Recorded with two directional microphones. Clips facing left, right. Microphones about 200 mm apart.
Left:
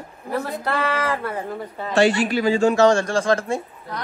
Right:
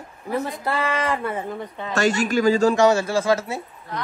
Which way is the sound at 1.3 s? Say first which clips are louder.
Even; centre (ahead or behind).